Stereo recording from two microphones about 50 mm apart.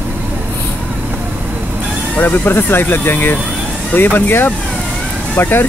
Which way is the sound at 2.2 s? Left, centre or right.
Left.